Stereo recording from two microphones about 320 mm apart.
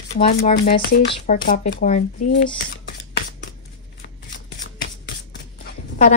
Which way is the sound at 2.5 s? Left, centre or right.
Left.